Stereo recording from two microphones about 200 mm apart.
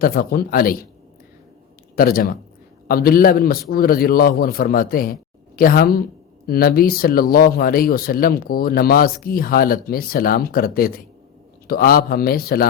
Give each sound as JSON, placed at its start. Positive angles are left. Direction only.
{"t": 0.0, "sound": "speech", "side_deg": 45}
{"t": 2.0, "sound": "speech", "side_deg": 45}